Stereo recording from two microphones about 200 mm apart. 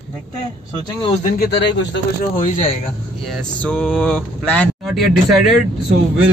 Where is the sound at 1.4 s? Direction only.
60° left (ahead or behind).